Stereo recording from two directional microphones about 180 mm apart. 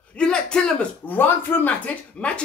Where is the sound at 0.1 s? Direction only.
5° left (ahead or behind).